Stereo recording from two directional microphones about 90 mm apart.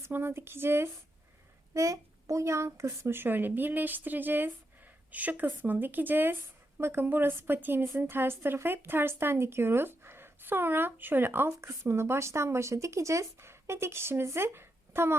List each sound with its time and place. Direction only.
0.0 s speech: 25° right (ahead or behind)
1.7 s speech: 35° right (ahead or behind)